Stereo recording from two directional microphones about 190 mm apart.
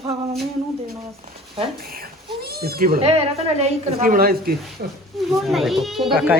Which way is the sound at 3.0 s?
30° right (ahead or behind).